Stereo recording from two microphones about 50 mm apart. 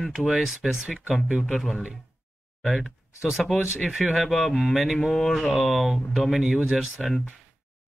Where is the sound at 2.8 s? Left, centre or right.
Centre.